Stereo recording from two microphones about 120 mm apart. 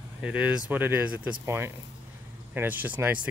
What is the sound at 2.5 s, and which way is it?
Speech, 15° right (ahead or behind).